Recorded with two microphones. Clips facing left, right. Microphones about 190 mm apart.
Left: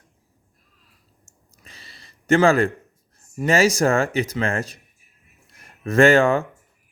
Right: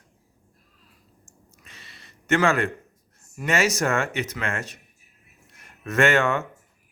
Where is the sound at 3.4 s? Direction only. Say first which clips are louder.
Left 5 dB; 35° left (ahead or behind).